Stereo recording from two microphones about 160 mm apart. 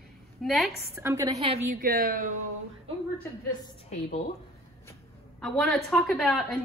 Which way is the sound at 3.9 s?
45° left (ahead or behind).